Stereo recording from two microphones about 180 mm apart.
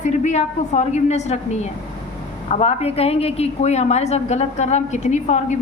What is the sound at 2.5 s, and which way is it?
A woman's voice, 35° left (ahead or behind).